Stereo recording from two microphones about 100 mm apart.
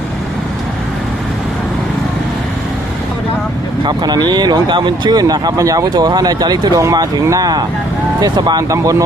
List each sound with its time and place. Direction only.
3.8 s speech: 45° right (ahead or behind)
8.7 s speech: 35° right (ahead or behind)